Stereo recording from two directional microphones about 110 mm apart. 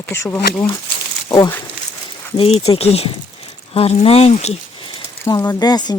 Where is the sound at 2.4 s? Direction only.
65° left (ahead or behind); by 4.5 s 85° left.